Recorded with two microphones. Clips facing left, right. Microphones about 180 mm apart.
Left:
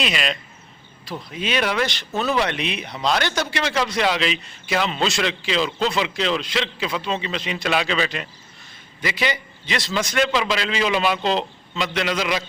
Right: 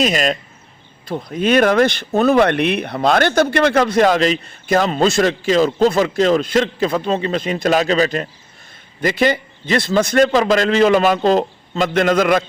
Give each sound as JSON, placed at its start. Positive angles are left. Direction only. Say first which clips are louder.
{"t": 0.0, "sound": "speech", "louder": "right 8 dB", "side_deg": -45}